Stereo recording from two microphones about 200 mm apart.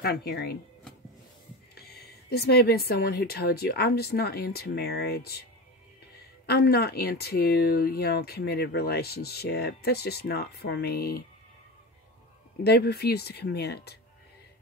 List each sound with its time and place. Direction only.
0.0 s speech: 50° left (ahead or behind)
1.8 s speech: 50° left (ahead or behind)
6.4 s speech: 50° left (ahead or behind)
12.6 s speech: 55° left (ahead or behind)